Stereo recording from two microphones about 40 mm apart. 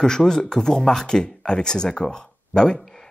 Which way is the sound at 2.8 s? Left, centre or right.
Centre.